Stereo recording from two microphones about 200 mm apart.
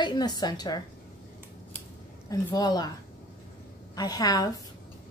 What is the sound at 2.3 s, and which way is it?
Speech, 20° left (ahead or behind).